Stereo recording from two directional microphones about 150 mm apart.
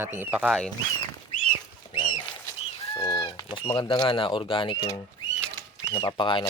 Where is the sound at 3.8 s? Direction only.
30° left (ahead or behind).